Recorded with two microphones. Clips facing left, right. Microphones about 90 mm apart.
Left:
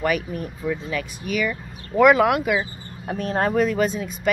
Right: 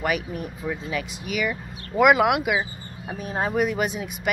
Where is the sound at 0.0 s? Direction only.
10° right (ahead or behind).